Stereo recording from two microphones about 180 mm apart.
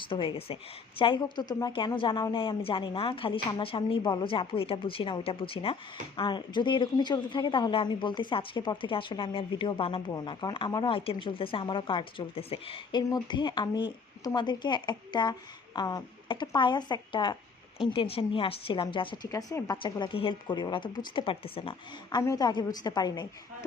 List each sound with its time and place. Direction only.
0.1 s a woman's voice: 30° left (ahead or behind)
22.2 s a woman's voice: 20° left (ahead or behind)